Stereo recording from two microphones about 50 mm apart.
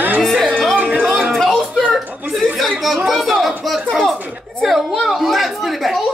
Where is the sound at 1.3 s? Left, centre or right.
Centre.